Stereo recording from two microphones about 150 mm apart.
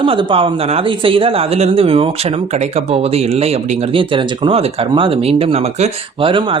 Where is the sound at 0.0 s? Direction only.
35° right (ahead or behind).